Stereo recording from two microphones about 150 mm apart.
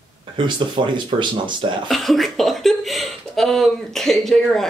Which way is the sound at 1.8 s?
Centre (ahead or behind).